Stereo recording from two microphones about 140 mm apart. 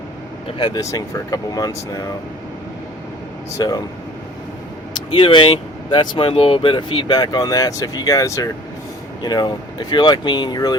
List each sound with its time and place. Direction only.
0.4 s speech: 35° left (ahead or behind)
3.6 s speech: 30° left (ahead or behind)
5.1 s speech: 40° left (ahead or behind)